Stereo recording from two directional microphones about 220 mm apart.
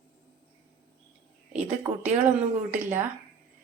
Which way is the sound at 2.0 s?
35° right (ahead or behind).